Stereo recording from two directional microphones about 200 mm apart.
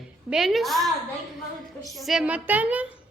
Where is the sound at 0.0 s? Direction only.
Centre (ahead or behind).